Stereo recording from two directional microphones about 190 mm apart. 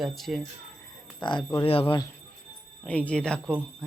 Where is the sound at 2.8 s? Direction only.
5° left (ahead or behind).